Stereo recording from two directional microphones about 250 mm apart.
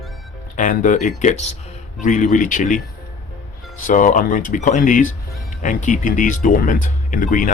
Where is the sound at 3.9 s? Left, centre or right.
Left.